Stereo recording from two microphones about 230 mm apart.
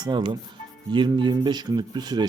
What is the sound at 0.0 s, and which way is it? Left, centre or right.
Speech, centre.